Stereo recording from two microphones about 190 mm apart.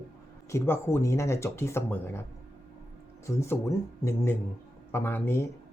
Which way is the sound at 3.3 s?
15° left (ahead or behind).